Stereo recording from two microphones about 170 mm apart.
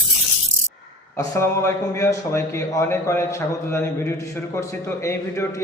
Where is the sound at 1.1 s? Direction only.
15° left (ahead or behind).